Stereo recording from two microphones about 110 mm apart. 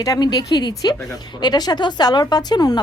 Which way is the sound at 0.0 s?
35° left (ahead or behind).